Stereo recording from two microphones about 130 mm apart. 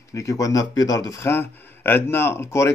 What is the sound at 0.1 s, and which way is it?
Speech, 25° left (ahead or behind).